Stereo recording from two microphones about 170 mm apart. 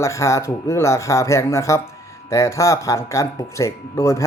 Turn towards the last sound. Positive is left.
turn(degrees=15)  # may be behind; listen again after turning